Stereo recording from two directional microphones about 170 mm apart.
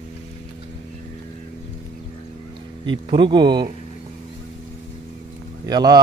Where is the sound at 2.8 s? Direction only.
30° right (ahead or behind).